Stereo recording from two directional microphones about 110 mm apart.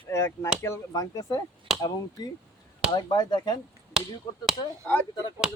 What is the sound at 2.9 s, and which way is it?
Speech, 40° left (ahead or behind).